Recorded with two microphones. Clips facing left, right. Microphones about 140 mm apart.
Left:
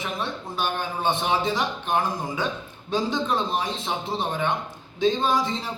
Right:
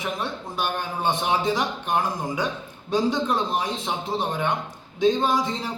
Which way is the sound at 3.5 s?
10° right (ahead or behind).